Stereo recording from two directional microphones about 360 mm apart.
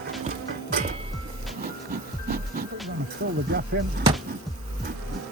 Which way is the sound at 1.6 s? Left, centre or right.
Right.